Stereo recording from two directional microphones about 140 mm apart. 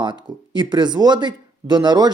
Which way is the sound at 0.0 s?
30° right (ahead or behind).